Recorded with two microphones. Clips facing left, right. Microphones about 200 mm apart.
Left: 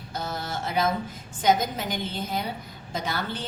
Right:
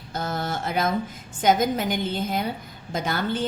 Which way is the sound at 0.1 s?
50° right (ahead or behind).